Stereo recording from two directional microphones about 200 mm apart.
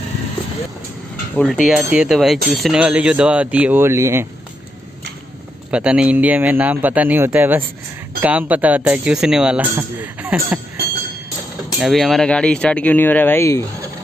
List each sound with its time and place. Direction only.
1.3 s speech: 5° left (ahead or behind); by 4.3 s 15° right (ahead or behind)
5.7 s speech: 5° right (ahead or behind)
11.8 s speech: centre (ahead or behind)